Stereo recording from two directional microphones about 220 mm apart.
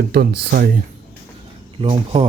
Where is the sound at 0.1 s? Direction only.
45° right (ahead or behind).